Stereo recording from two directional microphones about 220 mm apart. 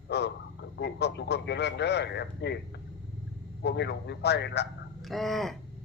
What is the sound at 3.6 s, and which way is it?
A man's voice, 50° left (ahead or behind).